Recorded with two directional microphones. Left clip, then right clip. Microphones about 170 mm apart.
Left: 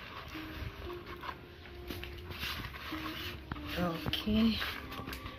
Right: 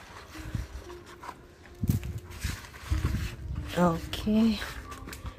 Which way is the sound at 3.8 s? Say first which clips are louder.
Right 5 dB; 50° right (ahead or behind).